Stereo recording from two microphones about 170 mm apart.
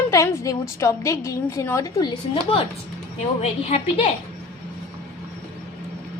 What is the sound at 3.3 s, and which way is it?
Speech, 35° left (ahead or behind).